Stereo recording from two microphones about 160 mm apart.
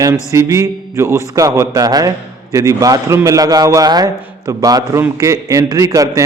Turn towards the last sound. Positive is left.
turn(degrees=-20)  # may be behind; listen again after turning